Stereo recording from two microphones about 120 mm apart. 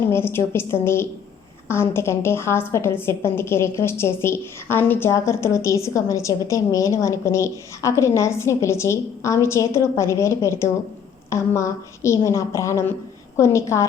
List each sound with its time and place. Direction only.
0.1 s a woman's voice: 20° left (ahead or behind)